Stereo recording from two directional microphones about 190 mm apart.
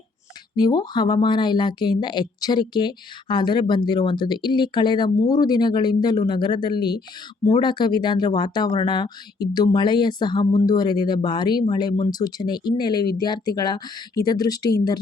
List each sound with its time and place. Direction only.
0.5 s a woman's voice: 20° left (ahead or behind)